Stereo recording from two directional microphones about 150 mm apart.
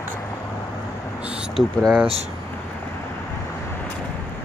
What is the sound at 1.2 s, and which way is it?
Speech, 5° right (ahead or behind).